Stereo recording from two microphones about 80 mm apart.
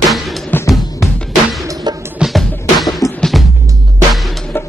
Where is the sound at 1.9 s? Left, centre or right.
Right.